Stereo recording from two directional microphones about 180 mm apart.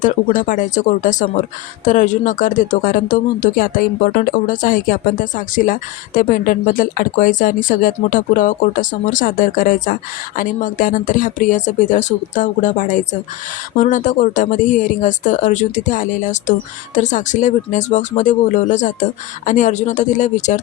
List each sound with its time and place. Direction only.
0.0 s speech: 45° left (ahead or behind)